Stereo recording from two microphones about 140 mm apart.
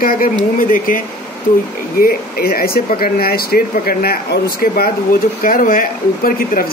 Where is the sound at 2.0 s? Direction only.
90° left.